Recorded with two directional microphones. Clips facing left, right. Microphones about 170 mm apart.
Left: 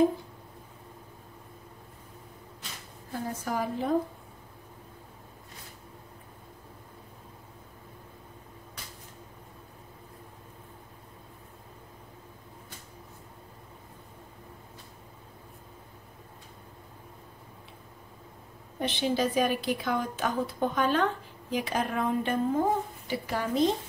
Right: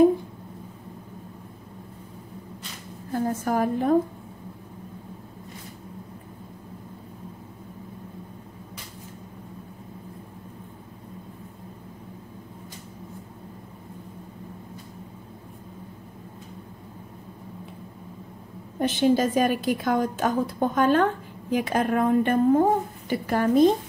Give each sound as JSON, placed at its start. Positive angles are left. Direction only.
{"t": 3.1, "sound": "a woman's voice", "side_deg": -50}
{"t": 18.8, "sound": "a woman's voice", "side_deg": -45}